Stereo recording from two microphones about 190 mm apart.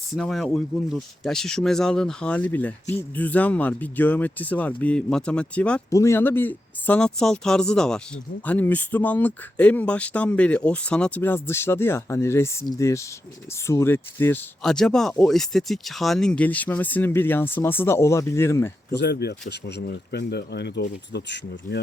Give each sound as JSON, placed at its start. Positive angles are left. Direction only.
{"t": 0.2, "sound": "speech", "side_deg": 0}
{"t": 18.9, "sound": "speech", "side_deg": 60}